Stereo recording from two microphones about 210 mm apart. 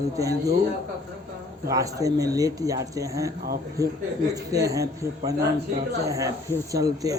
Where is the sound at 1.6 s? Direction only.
15° right (ahead or behind).